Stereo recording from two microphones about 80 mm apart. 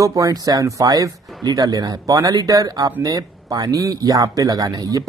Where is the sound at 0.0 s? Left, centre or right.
Right.